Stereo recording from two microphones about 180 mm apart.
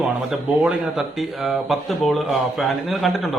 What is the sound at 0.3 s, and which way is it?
A man's voice, 5° right (ahead or behind).